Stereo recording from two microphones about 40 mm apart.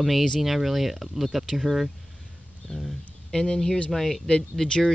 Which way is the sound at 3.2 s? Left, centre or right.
Centre.